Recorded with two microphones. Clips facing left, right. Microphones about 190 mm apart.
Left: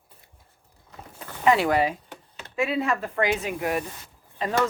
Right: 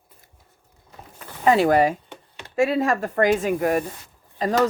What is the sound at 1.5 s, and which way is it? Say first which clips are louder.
Speech: right 4 dB; 40° right (ahead or behind).